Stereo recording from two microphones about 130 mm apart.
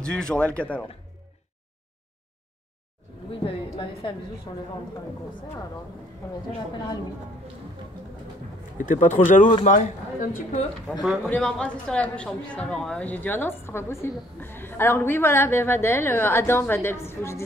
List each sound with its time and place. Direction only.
0.0 s speech: 5° left (ahead or behind)
3.4 s a woman's voice: 40° left (ahead or behind)
8.7 s speech: 90° left
10.9 s speech: centre (ahead or behind); by 17.5 s 20° left (ahead or behind)